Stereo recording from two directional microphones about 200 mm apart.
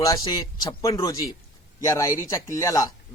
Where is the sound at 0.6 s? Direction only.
20° left (ahead or behind).